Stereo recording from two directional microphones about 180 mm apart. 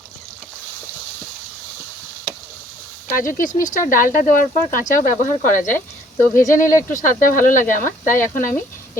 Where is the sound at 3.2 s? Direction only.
50° left (ahead or behind).